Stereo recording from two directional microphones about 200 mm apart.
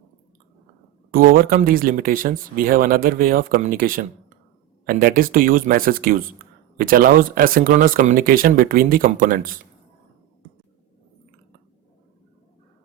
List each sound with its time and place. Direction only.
1.1 s speech: 45° right (ahead or behind)